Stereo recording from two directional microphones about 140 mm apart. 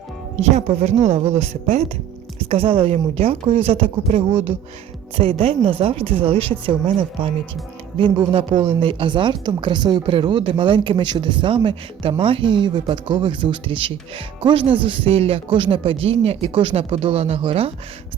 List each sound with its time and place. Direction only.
0.3 s a woman's voice: 50° right (ahead or behind)